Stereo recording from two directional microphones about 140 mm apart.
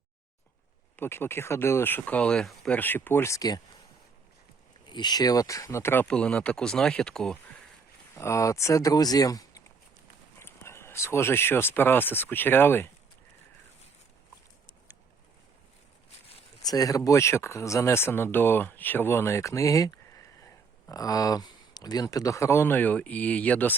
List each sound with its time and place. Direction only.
0.9 s speech: 15° left (ahead or behind)
4.9 s speech: 30° left (ahead or behind); by 7.3 s 5° left (ahead or behind)
8.1 s speech: 20° left (ahead or behind)
16.6 s speech: 25° left (ahead or behind)